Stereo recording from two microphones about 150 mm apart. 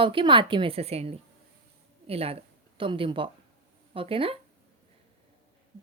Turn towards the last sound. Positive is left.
turn(degrees=-40)  # may be behind; listen again after turning